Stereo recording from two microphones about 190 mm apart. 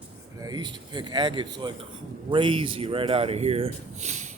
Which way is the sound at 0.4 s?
20° right (ahead or behind).